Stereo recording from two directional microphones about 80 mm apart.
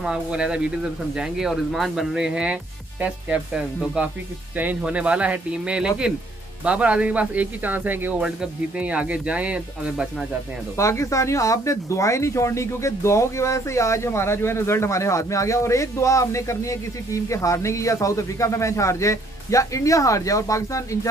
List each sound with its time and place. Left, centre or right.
0.0 s speech: centre
10.8 s speech: left